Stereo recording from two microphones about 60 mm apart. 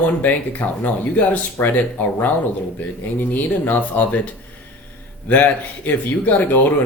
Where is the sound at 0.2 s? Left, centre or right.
Left.